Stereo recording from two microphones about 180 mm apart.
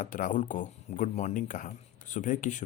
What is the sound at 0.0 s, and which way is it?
Speech, 45° left (ahead or behind).